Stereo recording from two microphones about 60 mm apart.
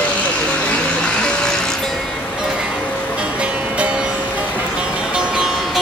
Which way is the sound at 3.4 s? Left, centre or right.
Centre.